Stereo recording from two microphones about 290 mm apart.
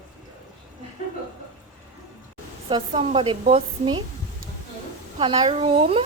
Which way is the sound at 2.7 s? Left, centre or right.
Centre.